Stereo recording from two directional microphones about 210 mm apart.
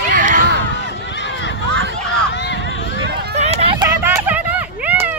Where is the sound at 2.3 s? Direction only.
60° left (ahead or behind).